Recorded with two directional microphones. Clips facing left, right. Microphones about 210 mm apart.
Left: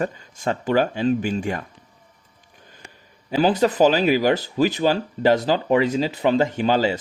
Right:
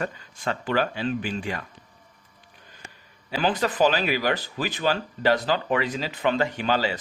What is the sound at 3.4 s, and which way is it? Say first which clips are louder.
Speech: left 5 dB; 40° left (ahead or behind).